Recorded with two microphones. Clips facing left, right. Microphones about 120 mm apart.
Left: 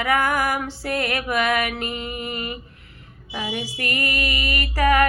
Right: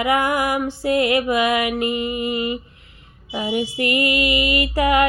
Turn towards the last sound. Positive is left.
turn(degrees=-20)  # may be behind; listen again after turning